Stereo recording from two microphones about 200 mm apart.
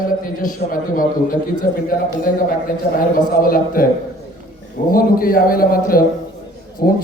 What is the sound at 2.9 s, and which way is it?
Speech, 45° left (ahead or behind).